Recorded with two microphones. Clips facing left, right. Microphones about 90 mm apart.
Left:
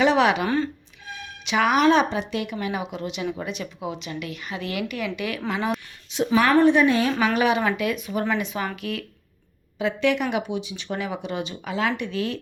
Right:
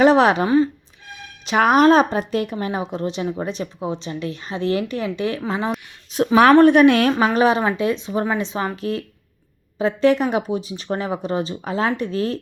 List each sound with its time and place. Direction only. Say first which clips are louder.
0.0 s a sound: right 5 dB; 40° right (ahead or behind)
0.4 s speech: right 7 dB; 15° right (ahead or behind)
1.5 s speech: right 5 dB; 40° right (ahead or behind)
6.1 s a woman's voice: right 5 dB; 45° right (ahead or behind)
6.4 s a woman's voice: right 7 dB; 65° right (ahead or behind)
7.3 s speech: right 4 dB; 35° right (ahead or behind)